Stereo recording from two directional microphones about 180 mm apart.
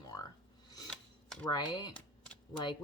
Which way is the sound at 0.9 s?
5° left (ahead or behind).